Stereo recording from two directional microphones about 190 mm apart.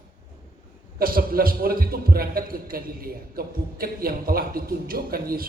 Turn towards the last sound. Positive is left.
turn(degrees=-50)  # may be behind; listen again after turning